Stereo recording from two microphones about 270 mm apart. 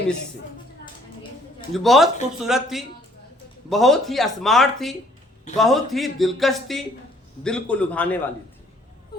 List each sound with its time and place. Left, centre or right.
1.7 s speech: centre